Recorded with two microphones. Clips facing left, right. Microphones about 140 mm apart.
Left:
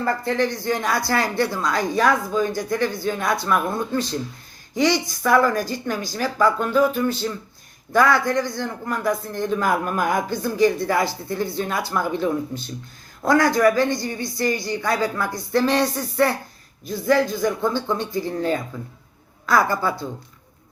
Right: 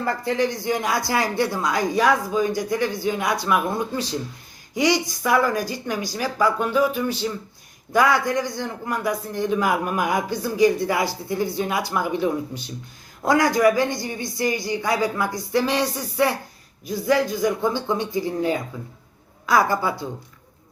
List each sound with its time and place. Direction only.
0.0 s a man's voice: 15° right (ahead or behind)